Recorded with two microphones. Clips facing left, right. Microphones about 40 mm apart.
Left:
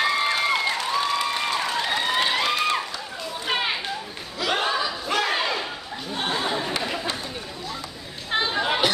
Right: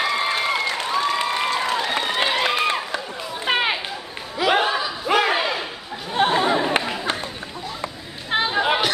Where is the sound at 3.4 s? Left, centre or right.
Centre.